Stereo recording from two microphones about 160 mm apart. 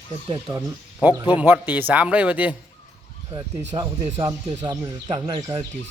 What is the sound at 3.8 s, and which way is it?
Speech, 30° right (ahead or behind).